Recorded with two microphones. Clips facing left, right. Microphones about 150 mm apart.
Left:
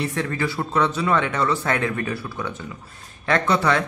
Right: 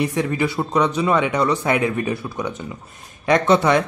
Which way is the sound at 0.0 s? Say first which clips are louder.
Right 4 dB; 15° right (ahead or behind).